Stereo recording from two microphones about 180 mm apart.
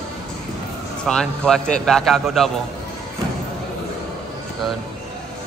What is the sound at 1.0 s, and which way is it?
A man's voice, 5° left (ahead or behind).